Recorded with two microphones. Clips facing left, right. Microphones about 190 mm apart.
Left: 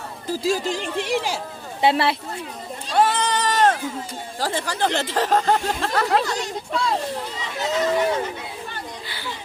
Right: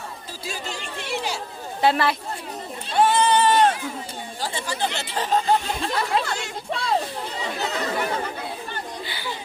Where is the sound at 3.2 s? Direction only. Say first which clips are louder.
Right 3 dB; 90° left.